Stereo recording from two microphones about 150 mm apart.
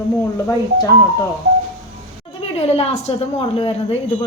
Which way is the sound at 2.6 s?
45° left (ahead or behind).